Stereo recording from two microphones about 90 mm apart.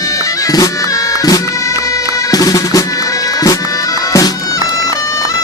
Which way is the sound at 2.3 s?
40° left (ahead or behind).